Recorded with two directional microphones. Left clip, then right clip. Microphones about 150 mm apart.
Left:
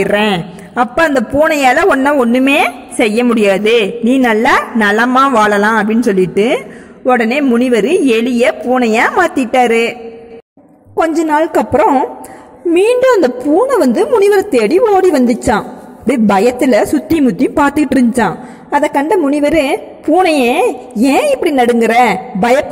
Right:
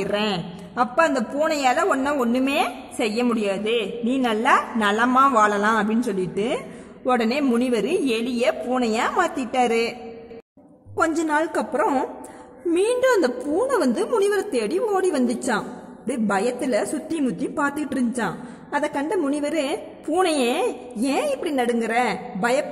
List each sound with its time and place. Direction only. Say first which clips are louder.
0.0 s a woman's voice: left 12 dB; 25° left (ahead or behind)
5.1 s a man's voice: left 4 dB; 15° left (ahead or behind)
5.4 s a woman's voice: left 9 dB; 30° left (ahead or behind)
11.0 s a woman's voice: left 10 dB; 25° left (ahead or behind)
14.0 s a woman's voice: left 11 dB; 20° left (ahead or behind)
14.3 s a woman's voice: left 13 dB; 30° left (ahead or behind)